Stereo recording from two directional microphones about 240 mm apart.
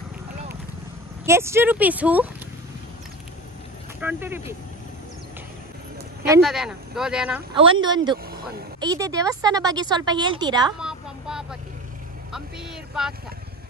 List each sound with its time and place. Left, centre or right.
1.2 s speech: centre
4.0 s speech: centre
6.4 s speech: centre
7.5 s speech: right
10.8 s a sound: centre
12.3 s speech: centre